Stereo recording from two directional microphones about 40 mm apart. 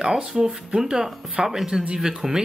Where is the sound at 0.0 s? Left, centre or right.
Centre.